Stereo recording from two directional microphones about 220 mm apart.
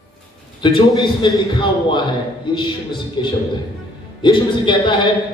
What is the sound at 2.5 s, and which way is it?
A man's voice, 20° left (ahead or behind).